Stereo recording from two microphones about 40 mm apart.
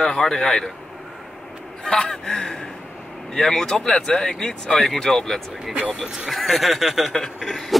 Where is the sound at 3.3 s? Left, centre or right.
Centre.